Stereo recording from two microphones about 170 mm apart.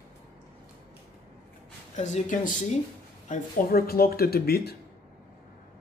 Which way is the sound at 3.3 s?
60° left (ahead or behind).